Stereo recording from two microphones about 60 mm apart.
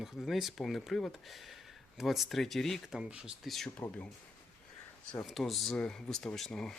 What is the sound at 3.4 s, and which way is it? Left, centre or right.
Speech, centre.